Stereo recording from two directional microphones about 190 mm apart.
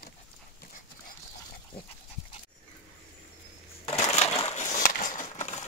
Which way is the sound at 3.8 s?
35° left (ahead or behind).